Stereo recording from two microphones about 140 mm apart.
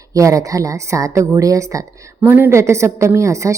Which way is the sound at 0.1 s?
25° right (ahead or behind).